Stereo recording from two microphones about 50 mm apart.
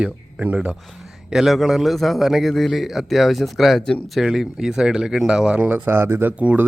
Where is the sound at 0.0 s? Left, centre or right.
Right.